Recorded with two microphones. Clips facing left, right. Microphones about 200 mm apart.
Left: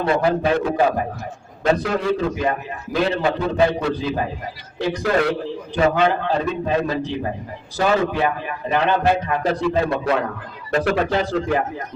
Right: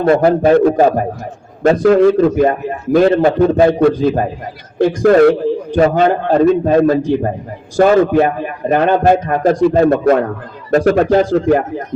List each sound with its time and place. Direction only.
0.0 s a man's voice: 45° right (ahead or behind)